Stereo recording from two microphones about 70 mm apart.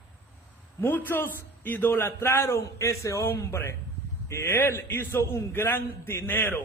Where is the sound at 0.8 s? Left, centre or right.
Left.